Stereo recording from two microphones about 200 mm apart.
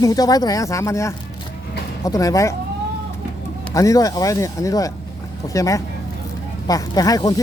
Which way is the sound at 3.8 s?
15° left (ahead or behind).